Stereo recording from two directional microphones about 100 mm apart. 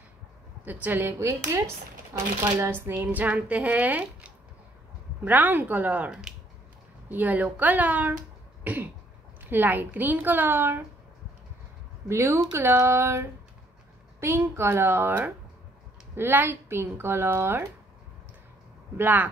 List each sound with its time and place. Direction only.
0.7 s a woman's voice: 15° right (ahead or behind)
2.6 s speech: 20° right (ahead or behind)
8.6 s cough: 15° right (ahead or behind)
9.4 s a woman's voice: 20° right (ahead or behind)
12.1 s a woman's voice: 30° right (ahead or behind)
18.9 s speech: 20° right (ahead or behind)